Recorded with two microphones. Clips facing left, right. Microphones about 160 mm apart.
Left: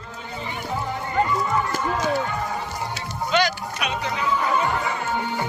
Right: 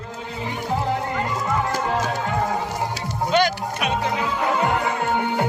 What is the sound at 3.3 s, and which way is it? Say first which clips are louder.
Music: right 2 dB; 50° right (ahead or behind).